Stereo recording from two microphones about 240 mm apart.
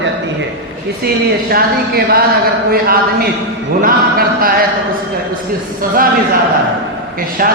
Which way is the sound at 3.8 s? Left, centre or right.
Right.